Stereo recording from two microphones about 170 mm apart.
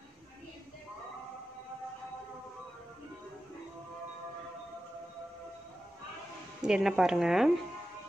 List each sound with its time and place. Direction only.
6.6 s speech: 5° right (ahead or behind)